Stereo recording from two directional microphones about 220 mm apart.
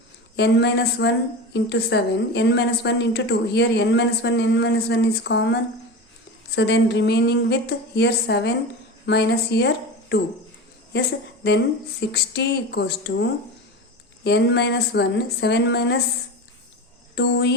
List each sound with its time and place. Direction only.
0.3 s a woman's voice: 50° left (ahead or behind)
6.6 s a woman's voice: 50° left (ahead or behind)
11.4 s a woman's voice: 50° left (ahead or behind)
17.2 s a woman's voice: 50° left (ahead or behind)